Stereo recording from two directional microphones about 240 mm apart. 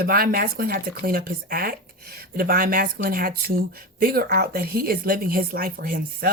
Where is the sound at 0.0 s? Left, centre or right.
Right.